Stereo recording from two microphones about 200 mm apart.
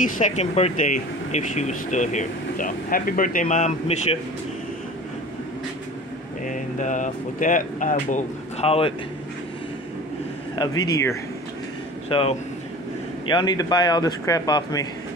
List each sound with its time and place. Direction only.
0.0 s speech: 35° left (ahead or behind)
6.4 s speech: 40° left (ahead or behind)
10.6 s speech: 20° left (ahead or behind)
12.1 s speech: 30° left (ahead or behind)